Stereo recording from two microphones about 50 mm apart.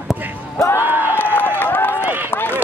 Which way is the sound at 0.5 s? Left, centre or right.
Left.